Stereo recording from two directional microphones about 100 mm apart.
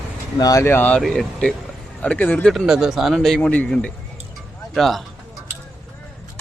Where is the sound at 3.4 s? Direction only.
15° left (ahead or behind).